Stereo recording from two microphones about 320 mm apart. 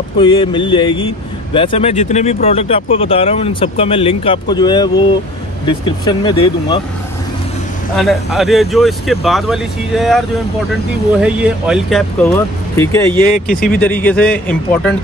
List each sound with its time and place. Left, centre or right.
0.2 s speech: centre
7.9 s speech: centre
13.5 s speech: left
13.7 s speech: centre